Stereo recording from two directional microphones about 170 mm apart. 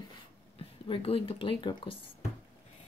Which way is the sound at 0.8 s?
35° left (ahead or behind).